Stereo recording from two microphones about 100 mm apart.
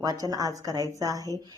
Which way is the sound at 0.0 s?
40° right (ahead or behind).